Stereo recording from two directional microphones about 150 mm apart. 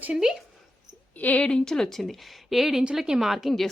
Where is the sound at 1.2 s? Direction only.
10° left (ahead or behind).